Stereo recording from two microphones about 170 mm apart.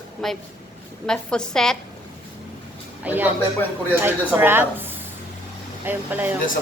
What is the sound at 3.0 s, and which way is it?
A woman's voice, 10° right (ahead or behind).